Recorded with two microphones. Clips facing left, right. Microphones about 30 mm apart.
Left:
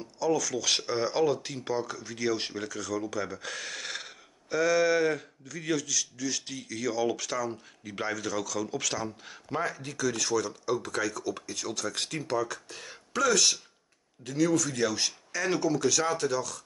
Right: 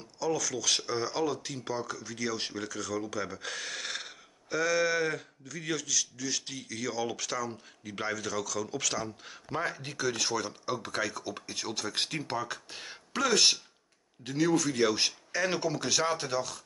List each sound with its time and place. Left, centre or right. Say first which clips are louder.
0.0 s speech: left 4 dB; centre
0.7 s speech: left 1 dB; centre
9.6 s speech: left 2 dB; right